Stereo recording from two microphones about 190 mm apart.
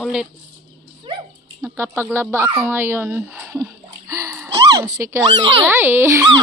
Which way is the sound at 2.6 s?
10° right (ahead or behind).